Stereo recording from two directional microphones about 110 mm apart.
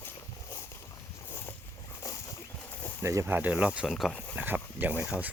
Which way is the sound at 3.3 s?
15° right (ahead or behind).